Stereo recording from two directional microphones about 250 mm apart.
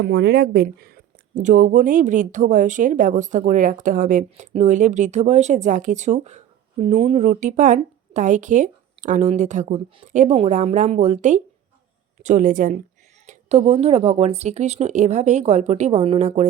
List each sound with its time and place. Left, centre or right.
0.0 s speech: right